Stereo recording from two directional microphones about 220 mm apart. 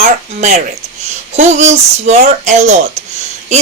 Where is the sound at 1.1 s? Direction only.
30° right (ahead or behind).